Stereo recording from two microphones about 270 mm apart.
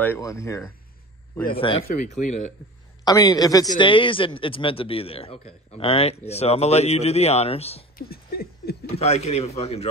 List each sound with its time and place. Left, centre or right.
0.0 s a man's voice: centre; by 2.5 s left
3.1 s a man's voice: centre
8.1 s rodents: left
9.0 s a man's voice: left